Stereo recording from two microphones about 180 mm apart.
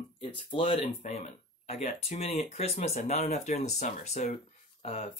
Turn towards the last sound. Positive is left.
turn(degrees=35)  # may be behind; listen again after turning